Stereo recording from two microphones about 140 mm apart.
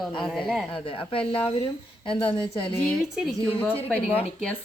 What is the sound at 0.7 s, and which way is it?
Speech, 40° left (ahead or behind).